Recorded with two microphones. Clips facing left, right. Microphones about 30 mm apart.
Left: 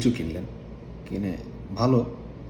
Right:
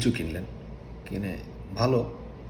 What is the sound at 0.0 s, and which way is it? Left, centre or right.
A man's voice, right.